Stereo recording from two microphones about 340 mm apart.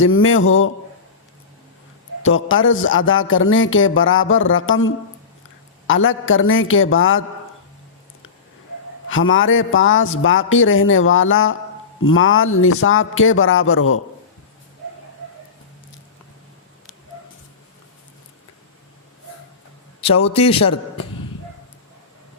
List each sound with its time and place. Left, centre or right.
0.0 s speech: left
2.2 s speech: left
5.9 s speech: left
9.0 s speech: left
20.0 s a man's voice: centre